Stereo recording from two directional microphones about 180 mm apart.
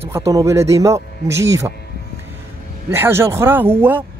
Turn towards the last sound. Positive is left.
turn(degrees=-10)  # may be behind; listen again after turning